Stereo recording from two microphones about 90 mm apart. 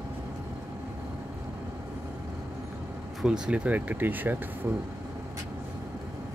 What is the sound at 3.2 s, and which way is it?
Speech, 10° right (ahead or behind).